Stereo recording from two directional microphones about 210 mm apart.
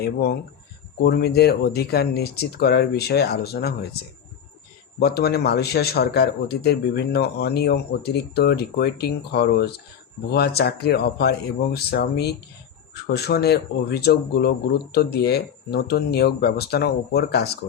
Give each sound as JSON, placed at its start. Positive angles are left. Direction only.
{"t": 0.0, "sound": "a man's voice", "side_deg": 50}
{"t": 4.9, "sound": "a man's voice", "side_deg": 50}